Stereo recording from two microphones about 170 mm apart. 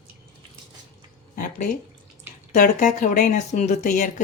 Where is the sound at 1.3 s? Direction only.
50° left (ahead or behind).